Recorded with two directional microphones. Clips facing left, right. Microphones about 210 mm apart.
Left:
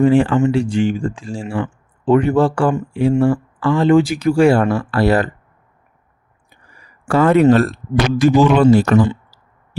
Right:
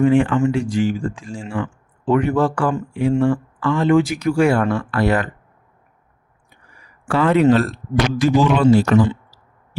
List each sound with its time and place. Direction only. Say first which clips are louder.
0.0 s speech: left 2 dB; 35° left (ahead or behind)
6.7 s speech: left 4 dB; 45° left (ahead or behind)